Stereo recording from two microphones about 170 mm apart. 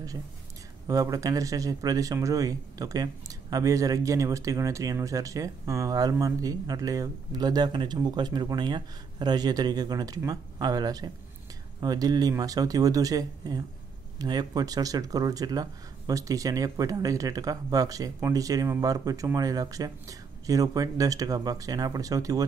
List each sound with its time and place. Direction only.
0.8 s speech: 20° right (ahead or behind)